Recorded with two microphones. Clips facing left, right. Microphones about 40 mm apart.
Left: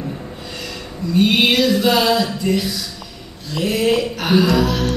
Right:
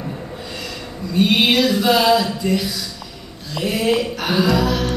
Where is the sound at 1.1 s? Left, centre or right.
Centre.